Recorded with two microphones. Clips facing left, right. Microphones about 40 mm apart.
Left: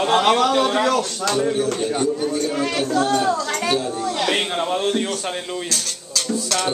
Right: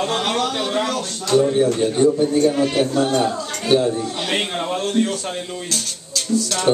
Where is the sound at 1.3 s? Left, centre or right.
Right.